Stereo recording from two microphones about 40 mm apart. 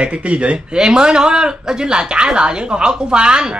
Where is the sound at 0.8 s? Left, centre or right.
Centre.